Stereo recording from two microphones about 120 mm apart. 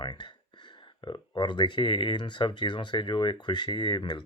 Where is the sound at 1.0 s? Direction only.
40° left (ahead or behind).